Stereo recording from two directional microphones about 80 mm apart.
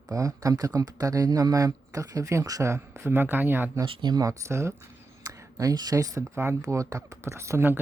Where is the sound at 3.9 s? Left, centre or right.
Right.